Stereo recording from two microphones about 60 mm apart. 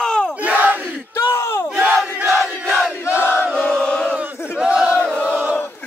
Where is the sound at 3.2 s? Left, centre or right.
Left.